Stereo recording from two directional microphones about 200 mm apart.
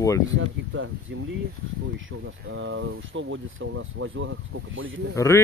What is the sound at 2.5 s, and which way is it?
Speech, 75° right (ahead or behind).